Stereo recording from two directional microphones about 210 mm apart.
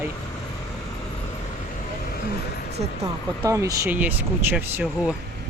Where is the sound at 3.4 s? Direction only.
15° right (ahead or behind).